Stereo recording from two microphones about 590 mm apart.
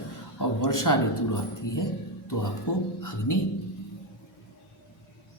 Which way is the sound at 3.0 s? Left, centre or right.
Left.